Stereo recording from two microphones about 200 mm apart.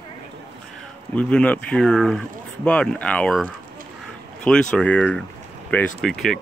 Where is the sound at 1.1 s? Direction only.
5° left (ahead or behind).